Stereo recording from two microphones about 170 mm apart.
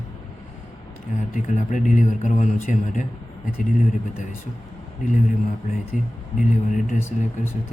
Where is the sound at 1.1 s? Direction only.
45° left (ahead or behind).